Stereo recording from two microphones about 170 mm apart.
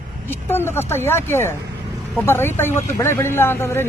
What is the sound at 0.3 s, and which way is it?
Speech, 15° left (ahead or behind).